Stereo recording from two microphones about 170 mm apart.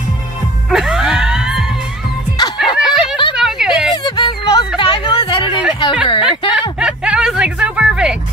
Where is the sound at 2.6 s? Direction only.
Centre (ahead or behind).